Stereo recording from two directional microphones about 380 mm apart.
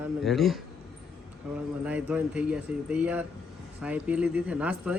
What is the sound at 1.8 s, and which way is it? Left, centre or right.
A woman's voice, centre.